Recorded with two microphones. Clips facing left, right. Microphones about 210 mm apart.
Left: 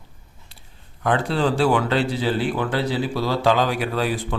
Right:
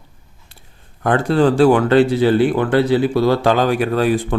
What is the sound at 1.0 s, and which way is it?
Speech, 50° right (ahead or behind).